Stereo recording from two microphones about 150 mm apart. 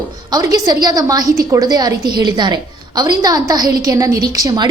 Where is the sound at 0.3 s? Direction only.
25° right (ahead or behind).